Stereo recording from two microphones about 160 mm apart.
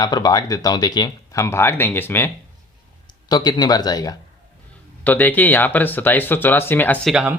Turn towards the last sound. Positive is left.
turn(degrees=-5)  # may be behind; listen again after turning